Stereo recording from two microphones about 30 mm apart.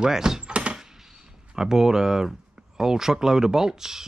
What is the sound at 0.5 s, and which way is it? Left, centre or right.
Door, right.